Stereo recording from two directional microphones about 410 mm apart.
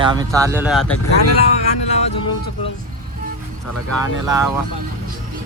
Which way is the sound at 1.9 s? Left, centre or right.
Centre.